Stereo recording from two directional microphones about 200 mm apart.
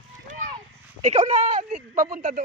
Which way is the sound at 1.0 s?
35° right (ahead or behind).